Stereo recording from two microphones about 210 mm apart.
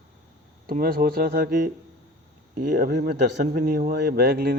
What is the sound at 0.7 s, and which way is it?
Speech, 45° right (ahead or behind).